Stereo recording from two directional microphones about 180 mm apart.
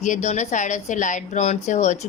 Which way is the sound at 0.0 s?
40° left (ahead or behind).